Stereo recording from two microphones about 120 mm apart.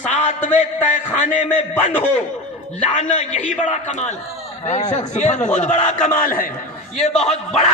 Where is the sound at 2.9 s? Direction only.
90° left.